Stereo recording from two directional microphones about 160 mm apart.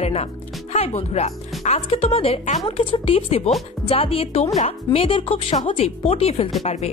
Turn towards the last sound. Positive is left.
turn(degrees=40)  # may be behind; listen again after turning